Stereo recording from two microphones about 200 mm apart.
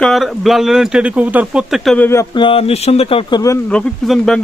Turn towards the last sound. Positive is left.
turn(degrees=0)  # may be behind; listen again after turning